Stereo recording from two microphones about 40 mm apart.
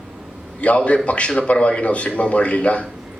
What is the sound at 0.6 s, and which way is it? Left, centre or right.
A man's voice, left.